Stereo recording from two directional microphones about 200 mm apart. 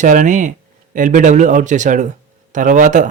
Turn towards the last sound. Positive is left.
turn(degrees=-40)  # may be behind; listen again after turning